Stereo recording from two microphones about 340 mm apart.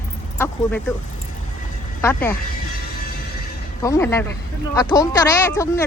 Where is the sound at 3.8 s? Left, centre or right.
Centre.